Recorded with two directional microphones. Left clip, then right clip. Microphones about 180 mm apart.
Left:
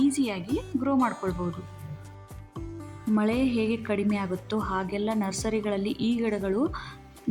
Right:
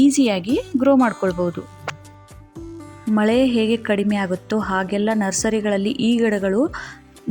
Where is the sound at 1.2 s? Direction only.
35° right (ahead or behind).